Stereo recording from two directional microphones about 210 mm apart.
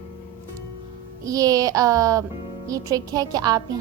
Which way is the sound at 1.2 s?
15° right (ahead or behind).